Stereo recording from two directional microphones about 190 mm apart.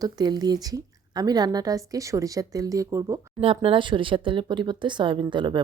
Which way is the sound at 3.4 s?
30° right (ahead or behind).